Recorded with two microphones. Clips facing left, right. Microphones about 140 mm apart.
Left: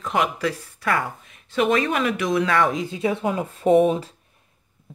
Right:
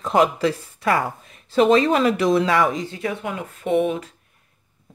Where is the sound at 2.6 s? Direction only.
Centre (ahead or behind).